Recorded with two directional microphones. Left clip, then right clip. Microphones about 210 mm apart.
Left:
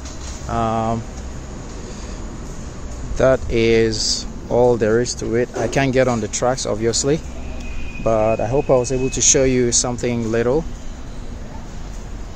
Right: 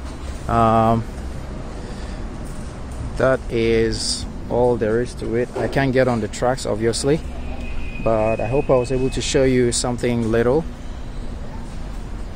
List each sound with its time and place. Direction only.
0.5 s speech: 25° right (ahead or behind)
3.2 s speech: 15° left (ahead or behind)
5.7 s speech: 10° left (ahead or behind)